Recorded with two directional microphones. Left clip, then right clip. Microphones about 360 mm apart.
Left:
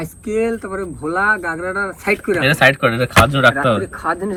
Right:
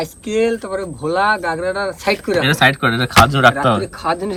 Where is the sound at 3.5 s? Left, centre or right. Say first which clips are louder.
Even; right.